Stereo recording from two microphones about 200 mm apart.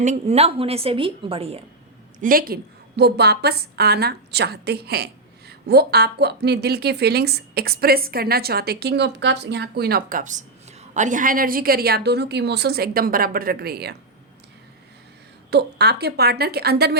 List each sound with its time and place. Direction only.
0.0 s a woman's voice: 35° right (ahead or behind)
2.2 s a woman's voice: 45° right (ahead or behind)
15.4 s a woman's voice: 55° right (ahead or behind)